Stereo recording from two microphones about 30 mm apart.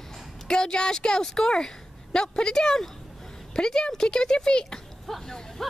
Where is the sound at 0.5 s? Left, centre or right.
Left.